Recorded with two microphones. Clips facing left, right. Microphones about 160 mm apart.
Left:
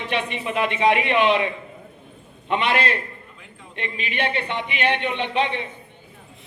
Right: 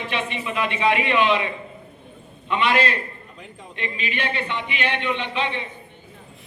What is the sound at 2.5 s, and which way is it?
Speech, 50° left (ahead or behind).